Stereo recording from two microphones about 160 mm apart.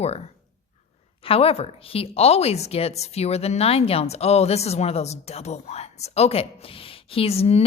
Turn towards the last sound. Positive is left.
turn(degrees=40)  # may be behind; listen again after turning